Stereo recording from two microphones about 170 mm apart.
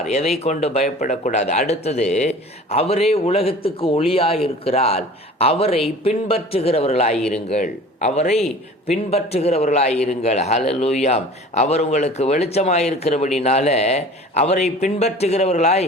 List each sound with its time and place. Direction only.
0.0 s speech: 40° left (ahead or behind)